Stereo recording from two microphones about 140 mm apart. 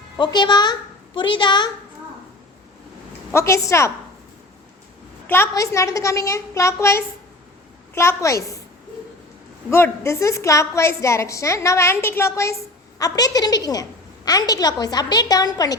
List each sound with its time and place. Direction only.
0.2 s a woman's voice: 35° left (ahead or behind)
3.3 s a woman's voice: 20° left (ahead or behind)
5.3 s a woman's voice: 20° left (ahead or behind)
9.6 s a woman's voice: 20° left (ahead or behind)